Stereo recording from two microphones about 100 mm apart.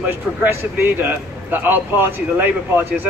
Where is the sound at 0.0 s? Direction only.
20° right (ahead or behind).